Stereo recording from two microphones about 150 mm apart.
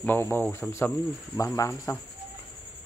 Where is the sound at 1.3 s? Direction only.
20° left (ahead or behind).